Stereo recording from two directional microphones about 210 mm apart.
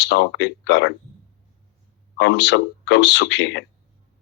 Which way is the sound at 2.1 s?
55° left (ahead or behind).